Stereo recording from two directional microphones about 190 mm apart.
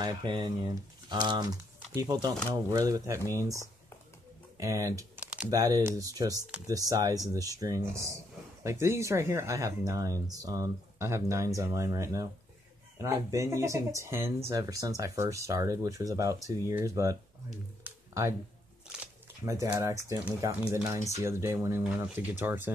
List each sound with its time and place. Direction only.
0.0 s speech: 20° right (ahead or behind)
4.6 s typing: 15° right (ahead or behind)
5.5 s speech: 20° right (ahead or behind)
19.6 s speech: 15° right (ahead or behind)